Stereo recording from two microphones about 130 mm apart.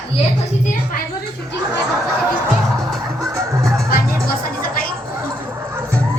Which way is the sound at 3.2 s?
25° right (ahead or behind).